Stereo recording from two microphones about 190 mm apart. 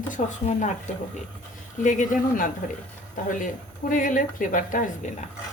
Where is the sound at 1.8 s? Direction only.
40° left (ahead or behind).